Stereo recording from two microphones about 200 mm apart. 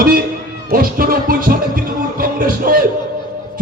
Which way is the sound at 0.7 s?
45° right (ahead or behind).